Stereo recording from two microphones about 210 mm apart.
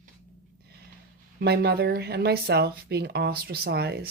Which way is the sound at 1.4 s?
50° right (ahead or behind).